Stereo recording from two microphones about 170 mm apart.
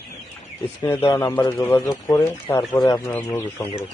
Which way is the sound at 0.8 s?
15° left (ahead or behind).